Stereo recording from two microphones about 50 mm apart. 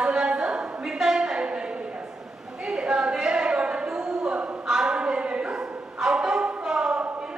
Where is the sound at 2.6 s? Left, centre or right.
Centre.